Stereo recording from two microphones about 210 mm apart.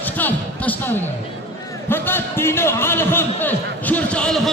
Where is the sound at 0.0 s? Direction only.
10° left (ahead or behind).